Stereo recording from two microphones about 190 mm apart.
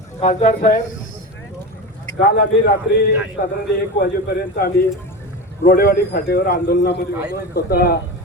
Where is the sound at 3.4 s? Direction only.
65° left (ahead or behind).